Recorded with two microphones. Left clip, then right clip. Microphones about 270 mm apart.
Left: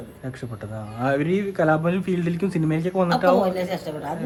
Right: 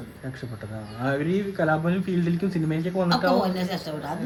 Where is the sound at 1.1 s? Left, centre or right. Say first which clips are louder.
Left 2 dB; left.